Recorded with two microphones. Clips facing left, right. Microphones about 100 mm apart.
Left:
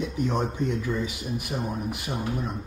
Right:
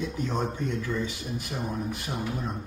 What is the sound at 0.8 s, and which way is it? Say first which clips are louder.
Speech: left 2 dB; 15° left (ahead or behind).